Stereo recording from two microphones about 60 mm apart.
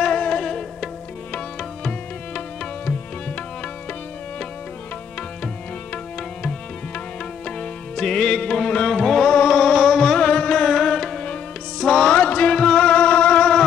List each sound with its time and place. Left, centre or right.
0.0 s music: centre
7.4 s music: centre